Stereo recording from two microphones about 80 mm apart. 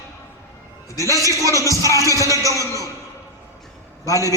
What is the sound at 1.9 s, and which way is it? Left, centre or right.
Speech, left.